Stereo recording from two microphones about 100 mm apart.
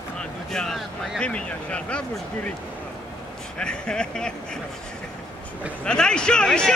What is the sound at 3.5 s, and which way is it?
Speech, 10° left (ahead or behind).